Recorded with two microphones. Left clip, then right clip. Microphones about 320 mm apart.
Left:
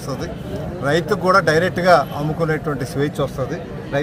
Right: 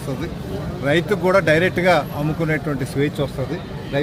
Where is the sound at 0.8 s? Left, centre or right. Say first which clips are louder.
Left 1 dB; centre.